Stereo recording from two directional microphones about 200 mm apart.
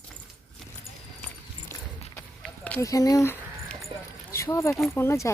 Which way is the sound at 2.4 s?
5° left (ahead or behind).